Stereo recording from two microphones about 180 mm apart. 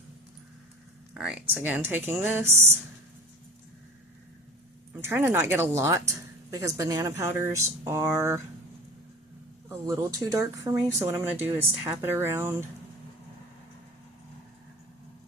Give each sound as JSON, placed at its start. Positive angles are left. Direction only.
{"t": 1.1, "sound": "speech", "side_deg": -5}
{"t": 4.9, "sound": "speech", "side_deg": -15}
{"t": 9.6, "sound": "speech", "side_deg": -20}